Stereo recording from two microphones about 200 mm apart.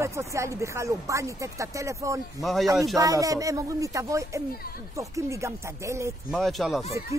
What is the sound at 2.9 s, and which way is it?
Speech, 15° right (ahead or behind).